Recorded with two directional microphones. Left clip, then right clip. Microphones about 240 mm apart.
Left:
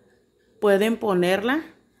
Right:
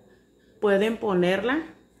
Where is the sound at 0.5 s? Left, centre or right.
Left.